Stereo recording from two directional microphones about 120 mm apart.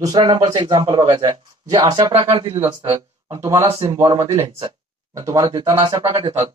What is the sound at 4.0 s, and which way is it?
Speech, 35° right (ahead or behind).